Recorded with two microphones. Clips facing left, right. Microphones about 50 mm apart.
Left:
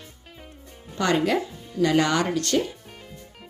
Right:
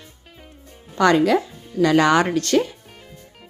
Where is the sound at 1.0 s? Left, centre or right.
Right.